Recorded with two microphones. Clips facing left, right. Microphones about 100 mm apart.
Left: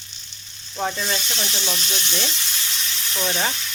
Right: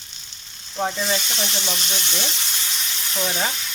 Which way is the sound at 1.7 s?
10° right (ahead or behind).